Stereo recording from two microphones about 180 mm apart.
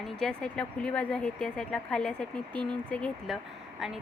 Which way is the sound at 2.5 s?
25° right (ahead or behind).